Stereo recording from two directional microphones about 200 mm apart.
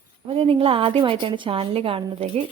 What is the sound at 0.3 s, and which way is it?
A woman's voice, 30° right (ahead or behind).